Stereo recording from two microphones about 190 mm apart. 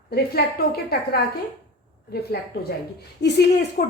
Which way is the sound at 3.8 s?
55° left (ahead or behind).